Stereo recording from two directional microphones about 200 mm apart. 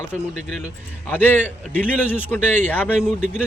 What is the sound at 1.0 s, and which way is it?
A man's voice, 10° left (ahead or behind).